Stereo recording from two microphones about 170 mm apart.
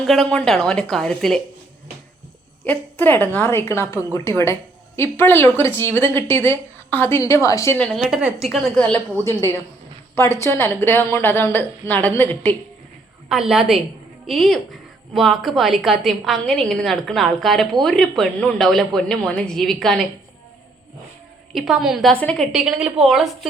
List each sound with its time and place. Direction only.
0.0 s a woman's voice: centre (ahead or behind)
2.6 s a woman's voice: 10° left (ahead or behind)
7.8 s a woman's voice: centre (ahead or behind)
9.2 s a woman's voice: 15° left (ahead or behind)
13.2 s a woman's voice: 5° right (ahead or behind)
21.5 s a woman's voice: centre (ahead or behind)